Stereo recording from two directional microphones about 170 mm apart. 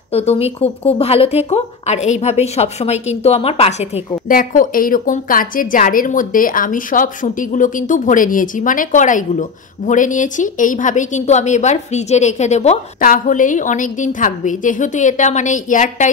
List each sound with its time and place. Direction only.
0.1 s speech: 35° left (ahead or behind)
4.3 s a woman's voice: 55° left (ahead or behind)